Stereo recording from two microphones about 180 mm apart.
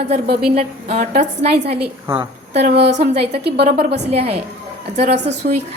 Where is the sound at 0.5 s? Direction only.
35° right (ahead or behind).